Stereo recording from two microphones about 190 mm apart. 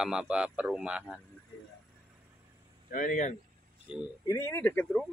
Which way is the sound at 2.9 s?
45° left (ahead or behind).